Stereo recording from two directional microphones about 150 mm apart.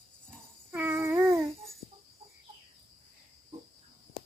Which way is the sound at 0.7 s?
15° right (ahead or behind).